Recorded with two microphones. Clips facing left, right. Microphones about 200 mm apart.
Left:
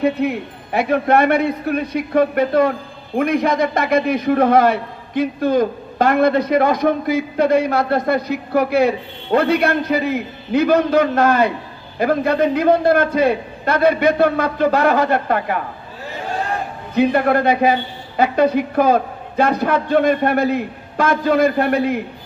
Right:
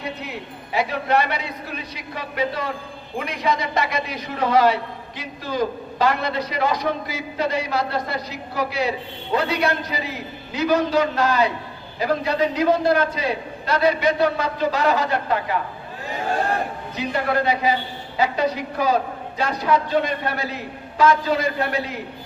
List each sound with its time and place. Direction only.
0.0 s a man's voice: 55° left (ahead or behind)
16.9 s a man's voice: 55° left (ahead or behind)